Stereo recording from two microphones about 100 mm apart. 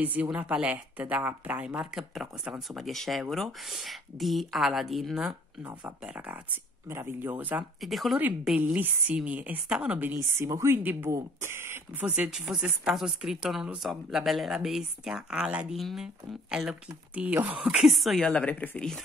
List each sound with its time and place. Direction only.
0.0 s a woman's voice: 15° right (ahead or behind)
5.6 s speech: 20° right (ahead or behind)
7.8 s a woman's voice: centre (ahead or behind)
10.2 s speech: 25° right (ahead or behind)
12.1 s a woman's voice: 10° right (ahead or behind); by 18.9 s 15° left (ahead or behind)